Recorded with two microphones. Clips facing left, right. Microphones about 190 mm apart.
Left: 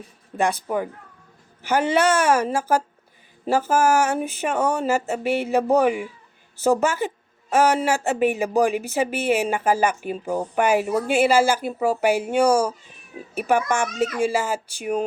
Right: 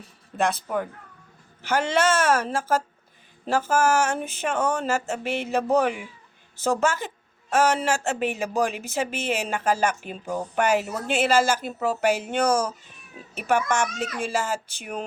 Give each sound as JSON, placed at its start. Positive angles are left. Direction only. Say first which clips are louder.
{"t": 0.3, "sound": "speech", "louder": "left 2 dB", "side_deg": 10}